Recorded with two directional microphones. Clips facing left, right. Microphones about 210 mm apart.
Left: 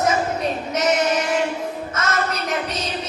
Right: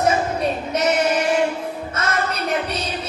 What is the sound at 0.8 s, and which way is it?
Female singing, 30° right (ahead or behind).